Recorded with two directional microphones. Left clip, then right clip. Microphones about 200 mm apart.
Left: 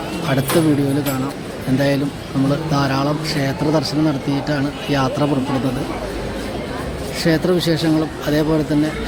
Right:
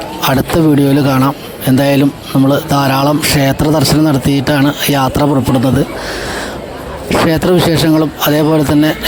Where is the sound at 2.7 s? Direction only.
55° right (ahead or behind).